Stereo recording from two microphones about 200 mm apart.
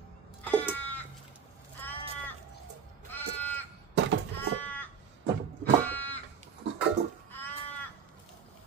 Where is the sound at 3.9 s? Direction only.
75° right (ahead or behind).